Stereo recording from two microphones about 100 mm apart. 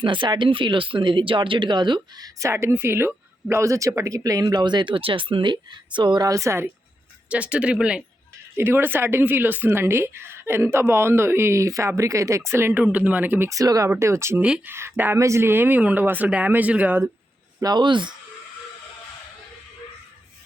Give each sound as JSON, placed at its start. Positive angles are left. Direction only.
{"t": 0.0, "sound": "speech", "side_deg": -55}
{"t": 7.3, "sound": "speech", "side_deg": -10}
{"t": 8.5, "sound": "speech", "side_deg": -25}
{"t": 12.8, "sound": "speech", "side_deg": -15}
{"t": 13.5, "sound": "speech", "side_deg": -35}
{"t": 17.6, "sound": "speech", "side_deg": -45}